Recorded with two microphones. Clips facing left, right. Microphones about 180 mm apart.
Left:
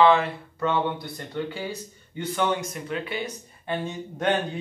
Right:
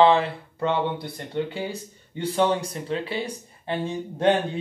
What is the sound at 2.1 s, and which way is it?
Speech, 30° right (ahead or behind).